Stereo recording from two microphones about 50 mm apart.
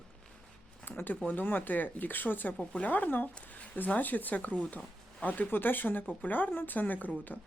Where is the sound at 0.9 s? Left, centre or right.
Left.